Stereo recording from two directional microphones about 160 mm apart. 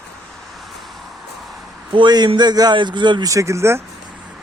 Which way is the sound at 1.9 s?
30° right (ahead or behind).